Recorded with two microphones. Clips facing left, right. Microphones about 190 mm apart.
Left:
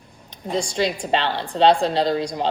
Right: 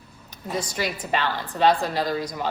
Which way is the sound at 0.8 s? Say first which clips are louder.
Left 5 dB; 25° left (ahead or behind).